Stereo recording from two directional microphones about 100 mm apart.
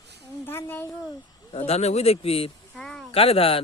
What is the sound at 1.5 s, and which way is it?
Speech, 90° left.